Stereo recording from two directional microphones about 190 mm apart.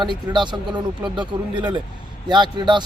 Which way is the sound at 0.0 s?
25° right (ahead or behind).